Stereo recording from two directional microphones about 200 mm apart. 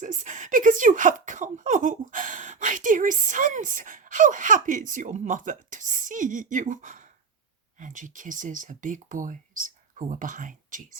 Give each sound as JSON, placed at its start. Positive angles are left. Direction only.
{"t": 0.0, "sound": "speech", "side_deg": -40}